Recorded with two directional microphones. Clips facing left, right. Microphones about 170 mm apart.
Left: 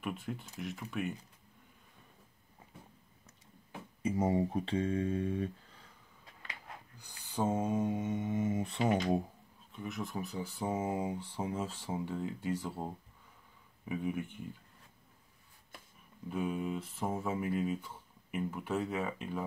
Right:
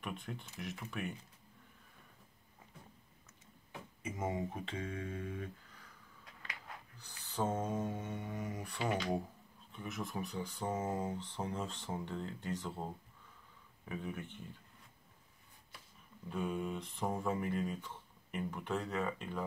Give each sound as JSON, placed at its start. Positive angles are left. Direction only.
{"t": 0.0, "sound": "speech", "side_deg": 5}
{"t": 4.0, "sound": "speech", "side_deg": 35}
{"t": 7.0, "sound": "mantra", "side_deg": 10}
{"t": 9.7, "sound": "speech", "side_deg": 0}
{"t": 16.3, "sound": "speech", "side_deg": 5}